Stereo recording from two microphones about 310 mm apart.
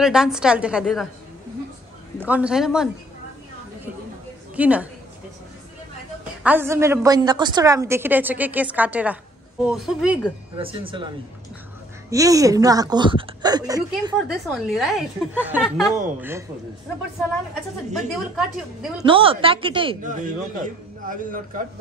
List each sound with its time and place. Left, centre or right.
0.0 s a woman's voice: centre
2.1 s a woman's voice: centre
4.6 s a woman's voice: centre
6.4 s a woman's voice: centre
10.6 s a woman's voice: centre
14.5 s a woman's voice: centre
17.9 s a woman's voice: centre
19.0 s a woman's voice: centre